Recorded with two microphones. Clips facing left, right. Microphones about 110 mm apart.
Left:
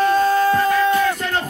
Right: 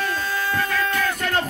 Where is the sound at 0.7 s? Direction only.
25° left (ahead or behind).